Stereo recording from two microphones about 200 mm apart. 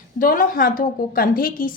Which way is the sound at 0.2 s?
40° left (ahead or behind).